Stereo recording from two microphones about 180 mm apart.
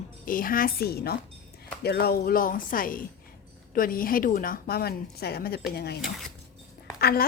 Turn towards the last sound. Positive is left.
turn(degrees=60)  # may be behind; listen again after turning